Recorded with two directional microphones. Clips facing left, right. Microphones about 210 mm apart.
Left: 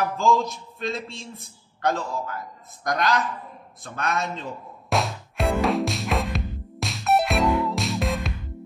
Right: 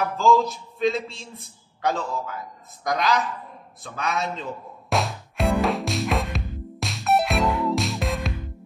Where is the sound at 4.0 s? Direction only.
Centre (ahead or behind).